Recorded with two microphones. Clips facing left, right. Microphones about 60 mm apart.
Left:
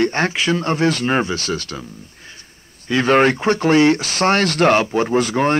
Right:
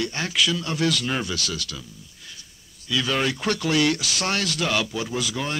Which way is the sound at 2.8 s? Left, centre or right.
Left.